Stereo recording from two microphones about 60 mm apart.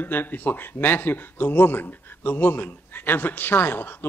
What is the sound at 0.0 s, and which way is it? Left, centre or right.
A man's voice, left.